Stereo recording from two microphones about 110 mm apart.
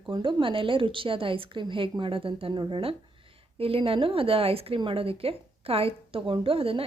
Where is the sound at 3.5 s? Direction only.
60° right (ahead or behind).